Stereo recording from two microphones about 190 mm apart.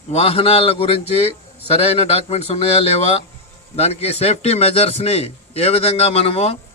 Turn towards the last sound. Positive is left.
turn(degrees=30)  # may be behind; listen again after turning